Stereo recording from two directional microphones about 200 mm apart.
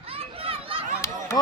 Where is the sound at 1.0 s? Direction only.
15° left (ahead or behind).